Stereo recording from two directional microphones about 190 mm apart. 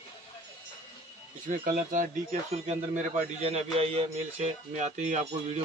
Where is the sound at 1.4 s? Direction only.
45° right (ahead or behind).